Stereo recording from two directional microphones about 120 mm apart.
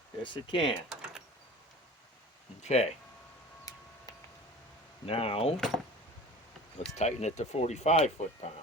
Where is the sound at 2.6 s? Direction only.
65° left (ahead or behind).